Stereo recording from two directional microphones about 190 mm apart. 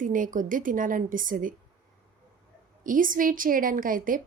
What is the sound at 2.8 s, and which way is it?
Speech, 45° right (ahead or behind).